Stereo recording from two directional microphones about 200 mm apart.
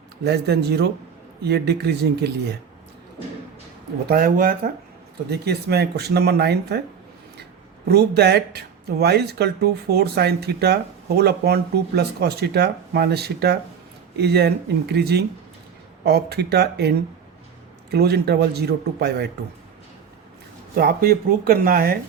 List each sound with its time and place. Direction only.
0.3 s speech: 55° right (ahead or behind)
4.1 s speech: 45° right (ahead or behind)
7.9 s speech: 55° right (ahead or behind)
17.9 s speech: 55° right (ahead or behind)
20.7 s speech: 50° right (ahead or behind)